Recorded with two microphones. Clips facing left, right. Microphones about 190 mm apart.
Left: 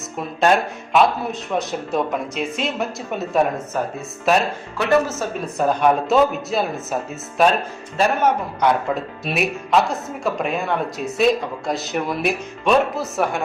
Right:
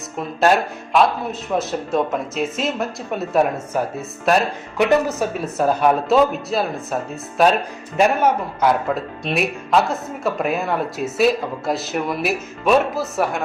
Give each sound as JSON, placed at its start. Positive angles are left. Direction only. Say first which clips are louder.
{"t": 0.2, "sound": "speech", "louder": "right 1 dB", "side_deg": 0}
{"t": 3.7, "sound": "speech", "louder": "right 3 dB", "side_deg": -10}
{"t": 4.3, "sound": "speech", "louder": "right 1 dB", "side_deg": 0}
{"t": 5.2, "sound": "speech", "louder": "right 2 dB", "side_deg": -10}
{"t": 7.9, "sound": "speech", "louder": "right 2 dB", "side_deg": -10}